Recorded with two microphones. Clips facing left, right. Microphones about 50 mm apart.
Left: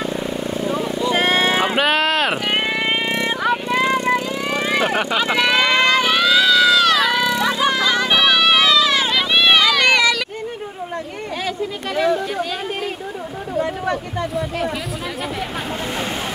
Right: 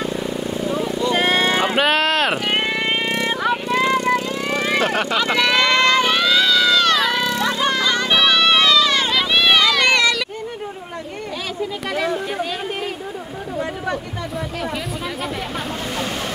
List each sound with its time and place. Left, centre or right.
0.0 s vehicle: centre
3.7 s vehicle: centre
4.6 s vehicle: centre